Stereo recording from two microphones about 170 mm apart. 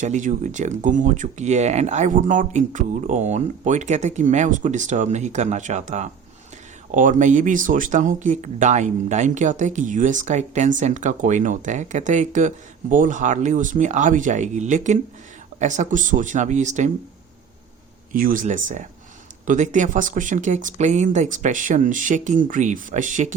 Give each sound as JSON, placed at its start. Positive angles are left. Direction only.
{"t": 0.0, "sound": "speech", "side_deg": -45}
{"t": 18.1, "sound": "speech", "side_deg": -55}